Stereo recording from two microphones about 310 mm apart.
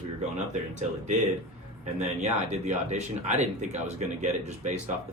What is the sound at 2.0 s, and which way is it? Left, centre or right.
Speech, right.